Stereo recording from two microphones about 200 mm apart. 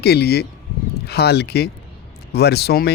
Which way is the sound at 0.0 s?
55° left (ahead or behind).